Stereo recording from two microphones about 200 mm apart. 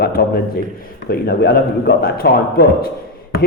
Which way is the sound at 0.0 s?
50° left (ahead or behind).